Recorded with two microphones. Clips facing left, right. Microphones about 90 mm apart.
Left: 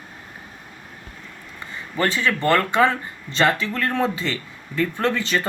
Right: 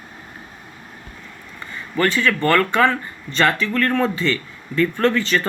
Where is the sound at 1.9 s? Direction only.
10° left (ahead or behind).